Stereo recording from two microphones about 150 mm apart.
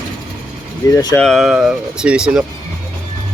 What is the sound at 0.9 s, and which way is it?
Speech, 20° left (ahead or behind).